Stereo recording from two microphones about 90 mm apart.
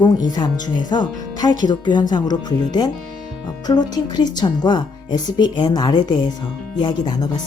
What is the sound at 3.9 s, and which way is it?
A woman's voice, 50° left (ahead or behind).